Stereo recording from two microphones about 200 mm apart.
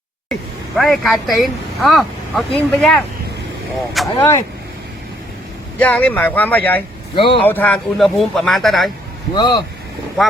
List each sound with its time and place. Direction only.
0.8 s speech: centre (ahead or behind)
5.8 s speech: 5° left (ahead or behind)
7.2 s speech: 25° left (ahead or behind)
7.4 s speech: 10° left (ahead or behind)
9.3 s speech: 20° left (ahead or behind)